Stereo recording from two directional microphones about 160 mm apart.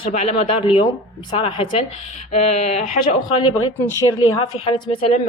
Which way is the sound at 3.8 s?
20° left (ahead or behind).